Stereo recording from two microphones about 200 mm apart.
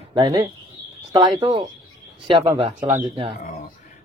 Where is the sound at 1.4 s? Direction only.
20° right (ahead or behind).